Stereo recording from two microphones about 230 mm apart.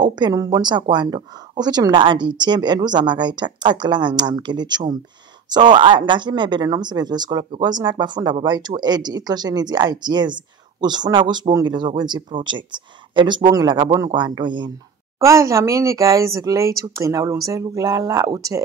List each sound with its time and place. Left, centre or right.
0.0 s speech: centre